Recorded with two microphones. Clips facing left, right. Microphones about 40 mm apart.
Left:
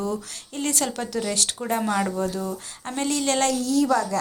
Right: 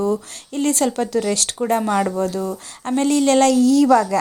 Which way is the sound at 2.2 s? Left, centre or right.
Right.